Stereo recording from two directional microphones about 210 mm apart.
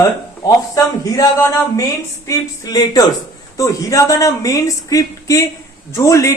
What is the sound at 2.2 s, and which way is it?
Speech, 20° left (ahead or behind).